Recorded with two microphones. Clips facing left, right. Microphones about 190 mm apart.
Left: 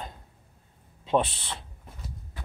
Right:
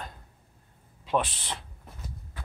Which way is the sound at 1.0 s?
25° left (ahead or behind).